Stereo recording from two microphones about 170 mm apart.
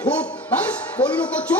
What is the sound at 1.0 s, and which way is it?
Speech, 30° left (ahead or behind).